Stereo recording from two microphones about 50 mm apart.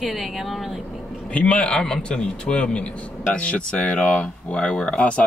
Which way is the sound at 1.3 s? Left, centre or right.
Left.